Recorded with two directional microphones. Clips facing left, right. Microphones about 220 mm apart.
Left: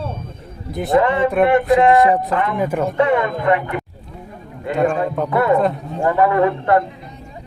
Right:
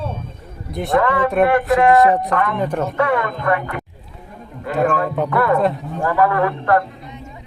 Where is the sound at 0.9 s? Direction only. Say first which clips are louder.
Left 2 dB; 20° left (ahead or behind).